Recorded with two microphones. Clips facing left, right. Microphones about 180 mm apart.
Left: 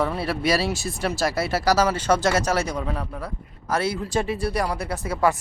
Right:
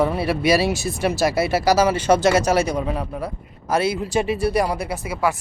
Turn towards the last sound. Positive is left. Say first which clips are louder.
# even
turn(degrees=-5)  # may be behind; listen again after turning